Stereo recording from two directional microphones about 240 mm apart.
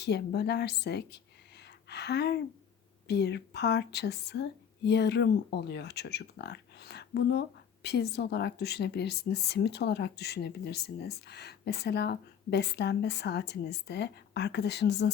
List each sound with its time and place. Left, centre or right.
0.0 s a woman's voice: left